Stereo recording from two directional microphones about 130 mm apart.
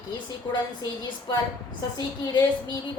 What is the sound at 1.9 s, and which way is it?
Speech, 35° left (ahead or behind).